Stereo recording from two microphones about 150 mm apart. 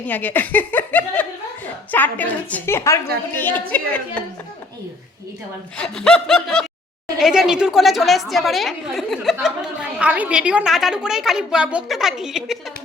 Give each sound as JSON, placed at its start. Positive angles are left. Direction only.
{"t": 0.1, "sound": "a woman's voice", "side_deg": 10}
{"t": 5.7, "sound": "a woman's voice", "side_deg": 5}